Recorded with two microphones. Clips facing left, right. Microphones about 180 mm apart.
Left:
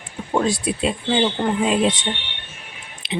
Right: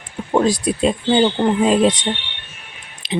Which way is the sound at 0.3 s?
40° right (ahead or behind).